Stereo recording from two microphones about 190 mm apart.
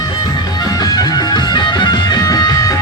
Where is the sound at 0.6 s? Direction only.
20° left (ahead or behind).